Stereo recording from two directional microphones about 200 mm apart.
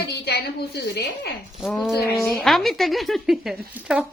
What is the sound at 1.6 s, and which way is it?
Speech, centre (ahead or behind).